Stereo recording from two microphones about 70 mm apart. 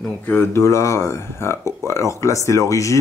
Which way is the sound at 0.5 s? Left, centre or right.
Left.